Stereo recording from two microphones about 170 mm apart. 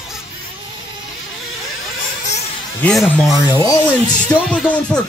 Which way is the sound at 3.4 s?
20° left (ahead or behind).